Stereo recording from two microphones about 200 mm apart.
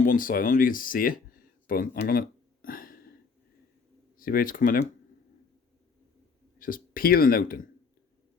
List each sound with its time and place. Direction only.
0.0 s speech: 45° left (ahead or behind)
1.6 s a sound: 45° left (ahead or behind)
4.2 s speech: 45° left (ahead or behind)
6.6 s speech: 45° left (ahead or behind)